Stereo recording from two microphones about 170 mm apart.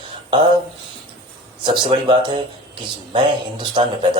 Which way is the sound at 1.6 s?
30° right (ahead or behind).